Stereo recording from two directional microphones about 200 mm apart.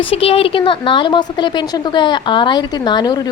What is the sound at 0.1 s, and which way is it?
A woman's voice, 30° left (ahead or behind).